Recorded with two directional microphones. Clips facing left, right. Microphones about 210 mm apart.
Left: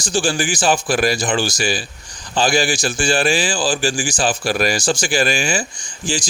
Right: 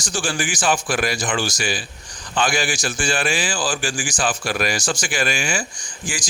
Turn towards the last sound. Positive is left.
turn(degrees=25)  # may be behind; listen again after turning